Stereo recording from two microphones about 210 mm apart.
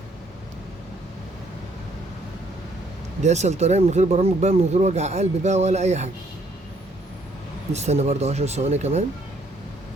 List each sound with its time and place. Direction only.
3.2 s speech: 30° right (ahead or behind)
7.7 s speech: 30° right (ahead or behind)